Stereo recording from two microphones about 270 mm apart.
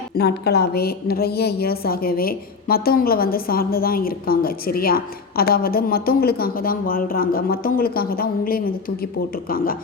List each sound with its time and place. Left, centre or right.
0.2 s a woman's voice: left